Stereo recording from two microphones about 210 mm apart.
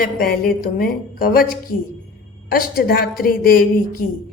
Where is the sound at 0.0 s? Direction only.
40° left (ahead or behind).